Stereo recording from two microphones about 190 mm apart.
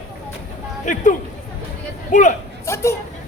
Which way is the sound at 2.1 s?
40° left (ahead or behind).